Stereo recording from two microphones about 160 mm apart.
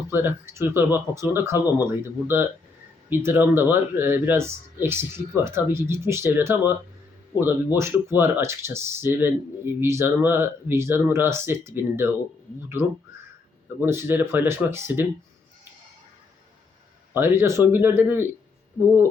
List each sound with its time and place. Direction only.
0.1 s speech: 15° right (ahead or behind)
13.8 s speech: 15° right (ahead or behind)
17.2 s speech: 15° right (ahead or behind)